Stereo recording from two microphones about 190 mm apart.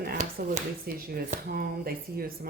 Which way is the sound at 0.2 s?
45° right (ahead or behind).